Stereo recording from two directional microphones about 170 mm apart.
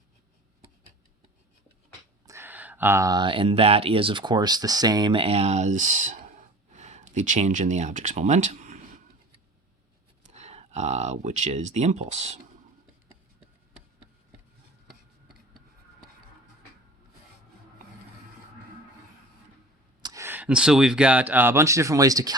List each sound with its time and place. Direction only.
2.2 s speech: 15° right (ahead or behind); by 9.0 s 50° right (ahead or behind)
10.3 s speech: 40° right (ahead or behind)
20.0 s a sound: 25° right (ahead or behind)
20.2 s speech: 10° right (ahead or behind)